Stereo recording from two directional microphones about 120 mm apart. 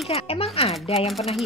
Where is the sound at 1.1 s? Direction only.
Centre (ahead or behind).